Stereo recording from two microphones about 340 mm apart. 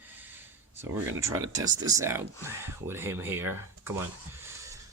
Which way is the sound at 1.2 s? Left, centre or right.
Centre.